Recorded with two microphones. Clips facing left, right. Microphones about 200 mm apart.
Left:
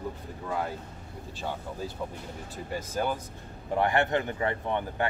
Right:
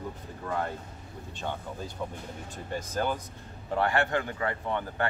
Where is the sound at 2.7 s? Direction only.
10° left (ahead or behind).